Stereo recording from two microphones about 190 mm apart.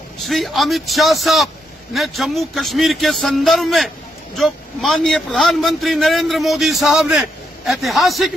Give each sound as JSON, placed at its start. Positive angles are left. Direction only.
{"t": 0.3, "sound": "a man's voice", "side_deg": 0}